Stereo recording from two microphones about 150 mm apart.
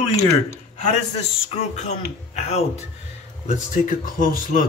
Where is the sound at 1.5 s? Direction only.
50° left (ahead or behind).